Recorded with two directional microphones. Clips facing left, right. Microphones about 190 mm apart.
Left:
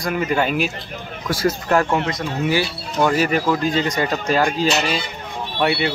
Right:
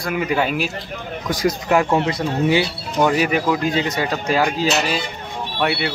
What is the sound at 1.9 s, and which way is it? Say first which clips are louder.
Speech: right 3 dB; 30° right (ahead or behind).